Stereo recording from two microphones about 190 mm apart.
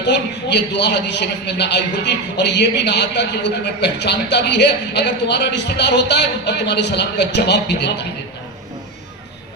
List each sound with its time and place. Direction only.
0.0 s a man's voice: 65° left (ahead or behind)